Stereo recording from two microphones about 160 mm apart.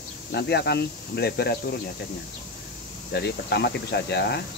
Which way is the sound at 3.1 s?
90° left.